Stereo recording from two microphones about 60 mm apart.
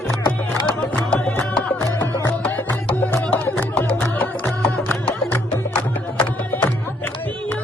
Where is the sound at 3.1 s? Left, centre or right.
Left.